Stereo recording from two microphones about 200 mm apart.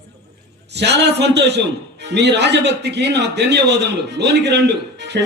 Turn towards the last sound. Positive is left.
turn(degrees=-60)  # may be behind; listen again after turning